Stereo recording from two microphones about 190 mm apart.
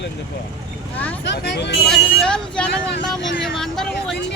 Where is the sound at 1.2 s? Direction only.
65° left (ahead or behind).